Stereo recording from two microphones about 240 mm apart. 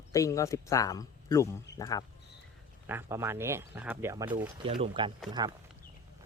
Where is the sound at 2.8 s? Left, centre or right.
Centre.